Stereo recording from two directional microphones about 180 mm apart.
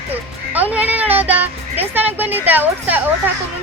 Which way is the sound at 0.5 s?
10° right (ahead or behind).